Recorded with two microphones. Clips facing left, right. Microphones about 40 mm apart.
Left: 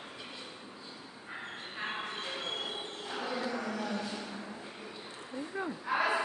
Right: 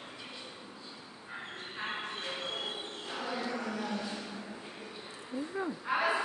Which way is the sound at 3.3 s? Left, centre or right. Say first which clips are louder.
Even; centre.